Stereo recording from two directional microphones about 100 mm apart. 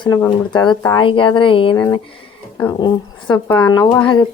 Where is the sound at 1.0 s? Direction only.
55° left (ahead or behind).